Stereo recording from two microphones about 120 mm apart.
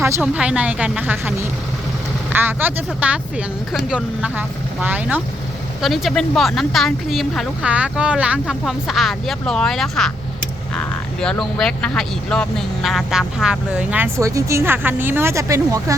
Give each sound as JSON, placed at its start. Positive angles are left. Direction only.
{"t": 0.0, "sound": "speech", "side_deg": -10}
{"t": 5.8, "sound": "speech", "side_deg": 0}
{"t": 14.2, "sound": "speech", "side_deg": -25}